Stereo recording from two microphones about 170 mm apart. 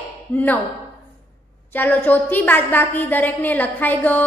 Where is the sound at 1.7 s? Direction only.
10° left (ahead or behind).